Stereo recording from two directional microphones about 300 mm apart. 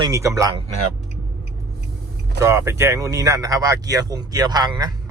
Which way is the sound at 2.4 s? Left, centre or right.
Centre.